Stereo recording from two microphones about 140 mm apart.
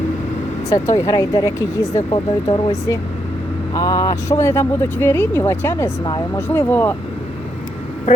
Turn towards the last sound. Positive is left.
turn(degrees=15)  # may be behind; listen again after turning